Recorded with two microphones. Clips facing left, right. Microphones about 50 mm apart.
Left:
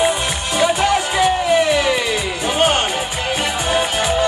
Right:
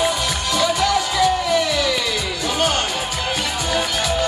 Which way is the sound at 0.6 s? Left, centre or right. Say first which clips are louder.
Left 3 dB; left.